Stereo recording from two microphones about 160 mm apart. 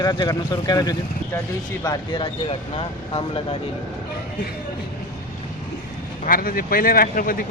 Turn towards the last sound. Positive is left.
turn(degrees=60)  # may be behind; listen again after turning